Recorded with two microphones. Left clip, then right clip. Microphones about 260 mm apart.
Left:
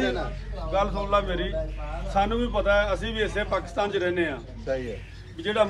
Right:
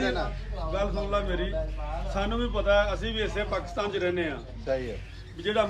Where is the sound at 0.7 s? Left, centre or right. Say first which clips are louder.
Left 5 dB; left.